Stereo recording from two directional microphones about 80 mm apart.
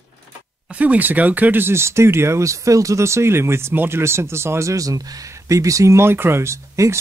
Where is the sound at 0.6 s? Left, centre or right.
Centre.